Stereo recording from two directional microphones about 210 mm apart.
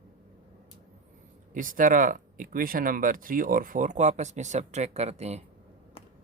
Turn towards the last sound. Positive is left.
turn(degrees=-30)  # may be behind; listen again after turning